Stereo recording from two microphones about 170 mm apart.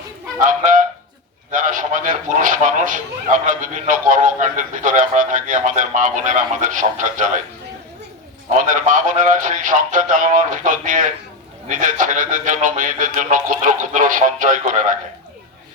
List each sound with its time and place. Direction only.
0.3 s a man's voice: 50° right (ahead or behind)
8.5 s a man's voice: 50° right (ahead or behind)